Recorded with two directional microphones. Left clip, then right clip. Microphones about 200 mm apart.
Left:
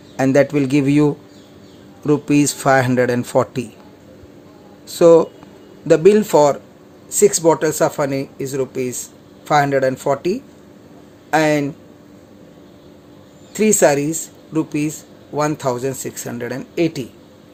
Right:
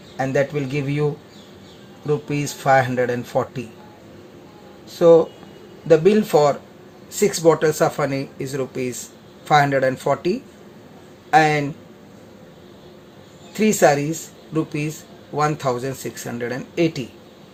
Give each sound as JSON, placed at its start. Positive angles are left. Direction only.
{"t": 0.2, "sound": "speech", "side_deg": 40}
{"t": 4.9, "sound": "speech", "side_deg": 40}
{"t": 13.5, "sound": "speech", "side_deg": 25}